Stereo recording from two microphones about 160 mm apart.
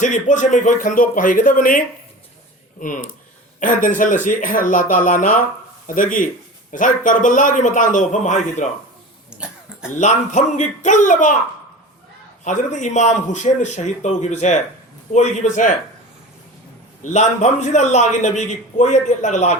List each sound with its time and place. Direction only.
0.0 s a man's voice: 50° left (ahead or behind)
3.6 s a man's voice: 55° left (ahead or behind)
9.3 s cough: 5° right (ahead or behind)
10.0 s a man's voice: 50° left (ahead or behind)
12.5 s a man's voice: 50° left (ahead or behind)
17.0 s a man's voice: 50° left (ahead or behind)